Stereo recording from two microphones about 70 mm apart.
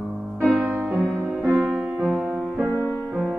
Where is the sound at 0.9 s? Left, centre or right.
Centre.